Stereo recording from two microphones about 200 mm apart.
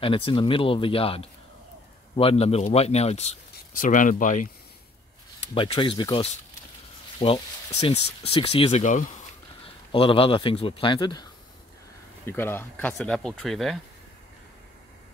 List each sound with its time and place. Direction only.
0.0 s a man's voice: 25° left (ahead or behind)
5.5 s a man's voice: 25° left (ahead or behind)
9.9 s a man's voice: 25° left (ahead or behind)
12.3 s speech: 10° left (ahead or behind)